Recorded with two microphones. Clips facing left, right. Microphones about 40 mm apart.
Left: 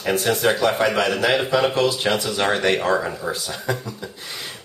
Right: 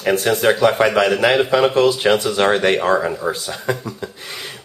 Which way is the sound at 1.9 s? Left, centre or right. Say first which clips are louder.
Right 5 dB; centre.